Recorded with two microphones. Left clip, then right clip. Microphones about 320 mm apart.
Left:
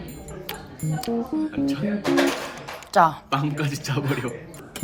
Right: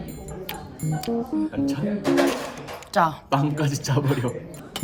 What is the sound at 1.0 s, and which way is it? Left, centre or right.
Speech, centre.